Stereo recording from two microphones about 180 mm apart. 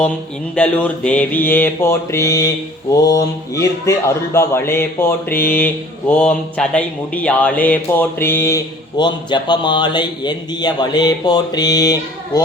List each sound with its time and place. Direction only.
0.5 s speech: 5° left (ahead or behind)